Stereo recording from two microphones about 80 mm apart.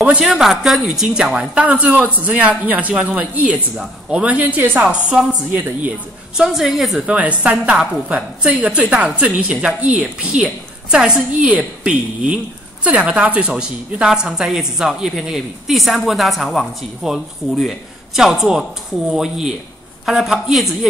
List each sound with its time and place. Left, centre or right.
0.2 s a woman's voice: centre; by 4.8 s right
4.8 s a woman's voice: centre
7.1 s a woman's voice: centre